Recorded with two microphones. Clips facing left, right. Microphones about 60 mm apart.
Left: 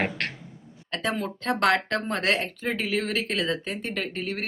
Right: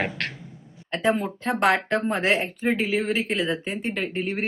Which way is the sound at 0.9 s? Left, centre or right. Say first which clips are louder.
Right 5 dB; centre.